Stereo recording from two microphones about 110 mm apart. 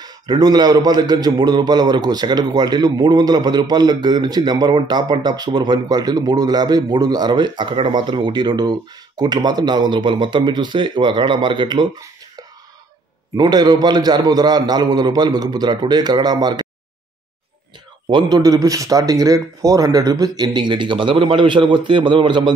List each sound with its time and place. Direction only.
0.0 s a man's voice: 35° right (ahead or behind)
13.4 s a man's voice: 40° right (ahead or behind)
18.0 s a man's voice: 45° right (ahead or behind)
18.4 s a man's voice: 30° right (ahead or behind); by 22.5 s 50° right (ahead or behind)